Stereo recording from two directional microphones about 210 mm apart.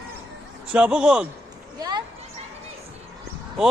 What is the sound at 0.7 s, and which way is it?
Speech, 5° right (ahead or behind).